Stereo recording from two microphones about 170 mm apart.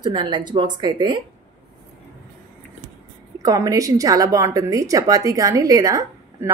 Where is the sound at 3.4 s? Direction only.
20° right (ahead or behind).